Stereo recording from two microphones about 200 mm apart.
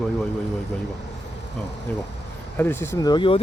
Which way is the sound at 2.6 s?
10° left (ahead or behind).